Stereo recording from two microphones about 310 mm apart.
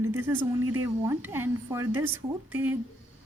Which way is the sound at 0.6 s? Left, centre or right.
Right.